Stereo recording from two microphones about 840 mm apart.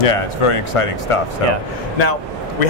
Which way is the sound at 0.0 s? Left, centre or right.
Left.